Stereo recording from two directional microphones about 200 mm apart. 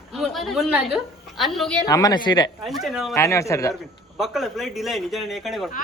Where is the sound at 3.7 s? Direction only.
Centre (ahead or behind).